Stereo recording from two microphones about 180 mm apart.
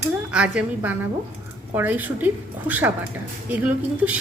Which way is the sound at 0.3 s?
5° right (ahead or behind).